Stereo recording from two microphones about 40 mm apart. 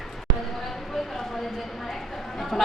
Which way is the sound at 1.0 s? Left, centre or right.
Centre.